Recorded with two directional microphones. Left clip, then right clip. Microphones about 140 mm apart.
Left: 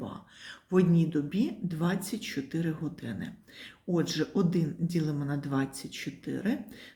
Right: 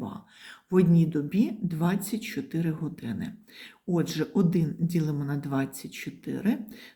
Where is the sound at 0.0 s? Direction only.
25° right (ahead or behind).